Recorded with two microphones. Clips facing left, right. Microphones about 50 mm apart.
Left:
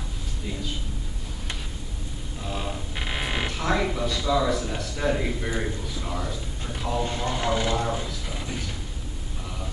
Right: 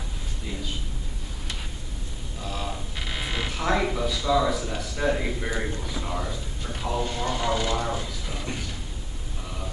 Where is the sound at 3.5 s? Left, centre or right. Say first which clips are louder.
Right 2 dB; centre.